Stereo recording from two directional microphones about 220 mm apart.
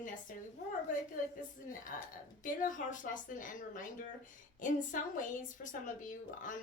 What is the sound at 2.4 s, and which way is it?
A woman's voice, 35° left (ahead or behind).